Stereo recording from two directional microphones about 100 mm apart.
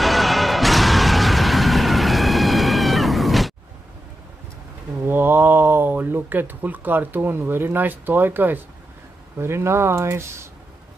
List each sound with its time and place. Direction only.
0.0 s music: centre (ahead or behind)
5.0 s speech: 20° right (ahead or behind)